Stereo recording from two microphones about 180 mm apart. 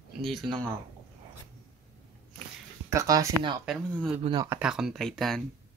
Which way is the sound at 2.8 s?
20° right (ahead or behind).